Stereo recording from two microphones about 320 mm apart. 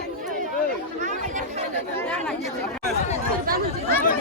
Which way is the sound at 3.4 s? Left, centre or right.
Right.